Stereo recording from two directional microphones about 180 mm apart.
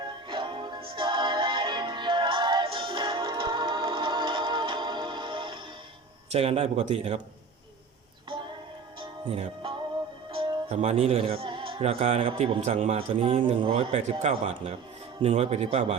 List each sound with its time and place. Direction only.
0.3 s music: 25° right (ahead or behind)
6.3 s speech: 35° right (ahead or behind)
9.0 s music: 30° right (ahead or behind)
10.3 s speech: 30° right (ahead or behind)